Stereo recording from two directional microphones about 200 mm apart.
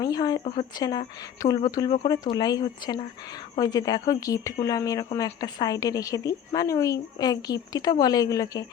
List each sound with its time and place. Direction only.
0.0 s a woman's voice: 20° left (ahead or behind)